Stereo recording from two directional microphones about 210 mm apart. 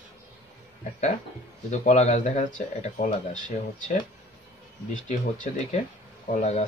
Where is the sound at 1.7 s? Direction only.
35° left (ahead or behind).